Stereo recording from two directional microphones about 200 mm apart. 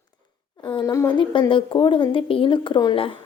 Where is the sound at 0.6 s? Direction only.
25° left (ahead or behind).